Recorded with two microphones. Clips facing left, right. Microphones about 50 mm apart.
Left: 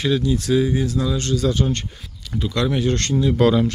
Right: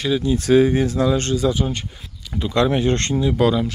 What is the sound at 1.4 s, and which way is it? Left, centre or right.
Speech, centre.